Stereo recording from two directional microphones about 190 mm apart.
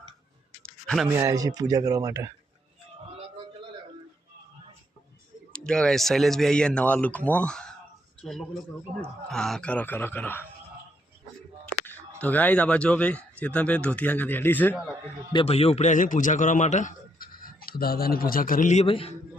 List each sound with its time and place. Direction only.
1.1 s speech: 15° right (ahead or behind)
5.5 s speech: 5° left (ahead or behind)
12.2 s speech: 10° left (ahead or behind)
15.3 s a man's voice: 30° left (ahead or behind)